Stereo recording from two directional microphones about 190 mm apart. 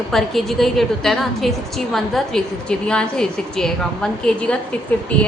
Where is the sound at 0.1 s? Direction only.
Centre (ahead or behind).